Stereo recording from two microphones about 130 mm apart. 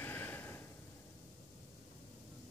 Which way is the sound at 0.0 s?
15° left (ahead or behind).